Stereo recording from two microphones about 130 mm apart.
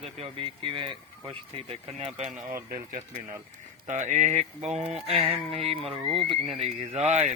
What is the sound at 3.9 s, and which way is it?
Speech, 65° right (ahead or behind).